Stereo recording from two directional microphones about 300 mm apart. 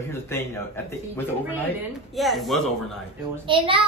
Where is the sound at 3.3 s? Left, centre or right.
Centre.